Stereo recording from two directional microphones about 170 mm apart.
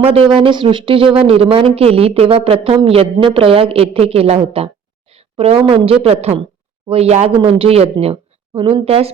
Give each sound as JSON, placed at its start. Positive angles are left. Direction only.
{"t": 0.0, "sound": "speech", "side_deg": -35}